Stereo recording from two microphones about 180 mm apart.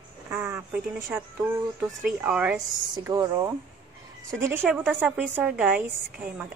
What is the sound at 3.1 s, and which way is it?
Speech, 20° right (ahead or behind).